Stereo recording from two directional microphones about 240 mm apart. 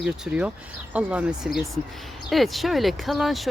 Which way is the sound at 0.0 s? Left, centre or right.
Centre.